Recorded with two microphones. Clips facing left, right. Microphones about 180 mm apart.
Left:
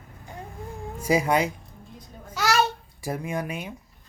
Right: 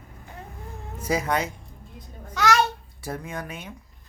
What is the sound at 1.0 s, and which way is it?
Speech, 15° left (ahead or behind).